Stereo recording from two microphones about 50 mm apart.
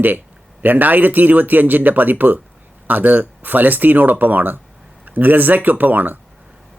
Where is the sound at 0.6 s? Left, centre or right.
Right.